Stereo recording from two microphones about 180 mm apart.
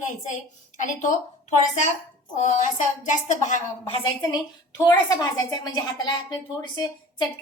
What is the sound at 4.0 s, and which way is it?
A woman's voice, 25° left (ahead or behind).